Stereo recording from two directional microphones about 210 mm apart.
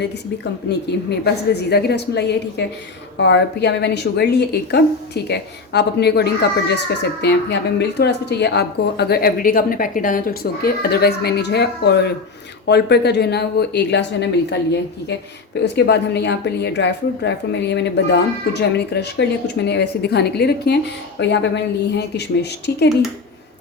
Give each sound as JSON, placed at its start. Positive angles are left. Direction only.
{"t": 1.1, "sound": "speech", "side_deg": 50}
{"t": 15.6, "sound": "speech", "side_deg": 55}